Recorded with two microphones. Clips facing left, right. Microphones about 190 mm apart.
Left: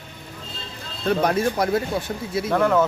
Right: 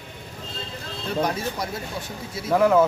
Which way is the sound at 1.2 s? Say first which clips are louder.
Left 6 dB; 60° left (ahead or behind).